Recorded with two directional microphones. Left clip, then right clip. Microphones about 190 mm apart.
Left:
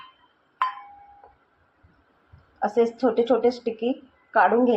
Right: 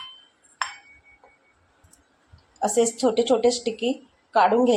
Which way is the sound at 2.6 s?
20° right (ahead or behind).